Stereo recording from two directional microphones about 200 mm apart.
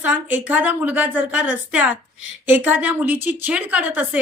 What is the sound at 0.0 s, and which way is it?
A woman's voice, 10° right (ahead or behind).